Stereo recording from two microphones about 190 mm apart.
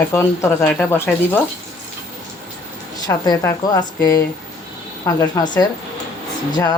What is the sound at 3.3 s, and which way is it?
Speech, 20° left (ahead or behind).